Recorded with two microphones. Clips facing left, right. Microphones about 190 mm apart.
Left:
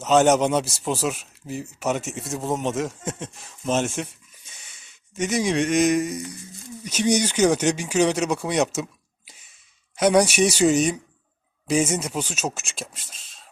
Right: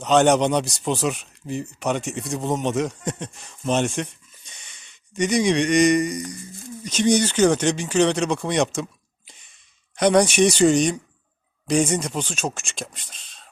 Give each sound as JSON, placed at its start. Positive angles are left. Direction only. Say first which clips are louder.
{"t": 0.0, "sound": "speech", "louder": "right 1 dB", "side_deg": 5}
{"t": 6.2, "sound": "a sound", "louder": "right 3 dB", "side_deg": -50}
{"t": 6.8, "sound": "speech", "louder": "right 2 dB", "side_deg": 10}